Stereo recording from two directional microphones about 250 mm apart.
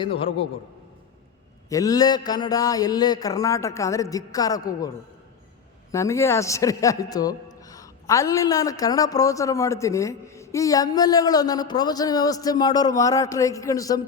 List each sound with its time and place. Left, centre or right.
0.0 s a man's voice: left
1.7 s a man's voice: centre
5.9 s a man's voice: centre